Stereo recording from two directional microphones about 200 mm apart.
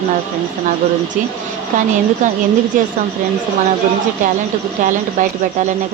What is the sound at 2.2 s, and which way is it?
Speech, 40° right (ahead or behind).